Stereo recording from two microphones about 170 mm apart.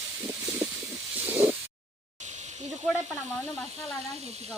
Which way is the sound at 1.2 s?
10° right (ahead or behind).